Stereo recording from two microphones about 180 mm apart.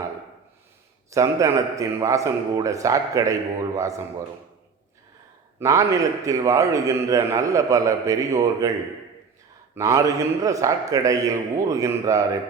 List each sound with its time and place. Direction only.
1.1 s a man's voice: 15° right (ahead or behind)
5.5 s a man's voice: 15° right (ahead or behind)
9.7 s a man's voice: 15° right (ahead or behind)